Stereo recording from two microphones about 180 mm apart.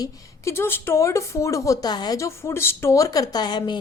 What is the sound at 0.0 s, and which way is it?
A woman's voice, 15° left (ahead or behind).